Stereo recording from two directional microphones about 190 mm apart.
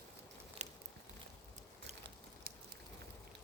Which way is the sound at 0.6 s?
35° right (ahead or behind).